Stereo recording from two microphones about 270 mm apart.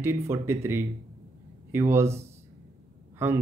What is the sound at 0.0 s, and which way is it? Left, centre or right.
A man's voice, centre.